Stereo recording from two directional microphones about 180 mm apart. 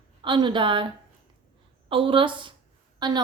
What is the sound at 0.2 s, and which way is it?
A woman's voice, 25° right (ahead or behind).